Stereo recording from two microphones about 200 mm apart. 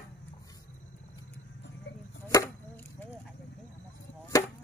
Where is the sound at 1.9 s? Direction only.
60° left (ahead or behind).